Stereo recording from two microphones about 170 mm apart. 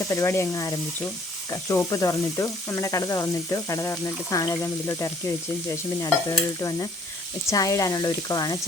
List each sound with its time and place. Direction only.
0.1 s speech: 15° left (ahead or behind)
1.5 s sizzle: 20° left (ahead or behind)